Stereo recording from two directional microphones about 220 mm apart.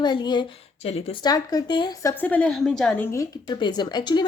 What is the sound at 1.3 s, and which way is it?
A woman's voice, 15° left (ahead or behind).